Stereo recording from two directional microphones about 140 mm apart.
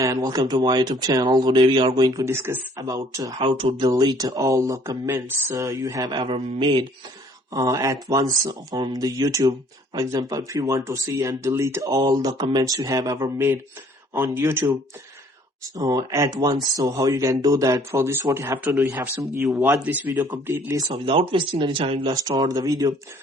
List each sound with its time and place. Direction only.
0.0 s speech: 25° right (ahead or behind)
3.3 s speech: 40° right (ahead or behind); by 14.6 s 15° right (ahead or behind)
15.8 s speech: 25° right (ahead or behind)
20.2 s speech: 25° right (ahead or behind)
21.0 s speech: 40° right (ahead or behind)
22.1 s speech: 25° right (ahead or behind)